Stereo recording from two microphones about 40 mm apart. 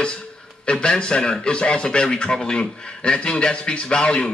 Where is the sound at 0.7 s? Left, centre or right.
Left.